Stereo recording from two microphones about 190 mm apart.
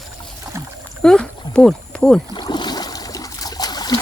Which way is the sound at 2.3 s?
25° left (ahead or behind).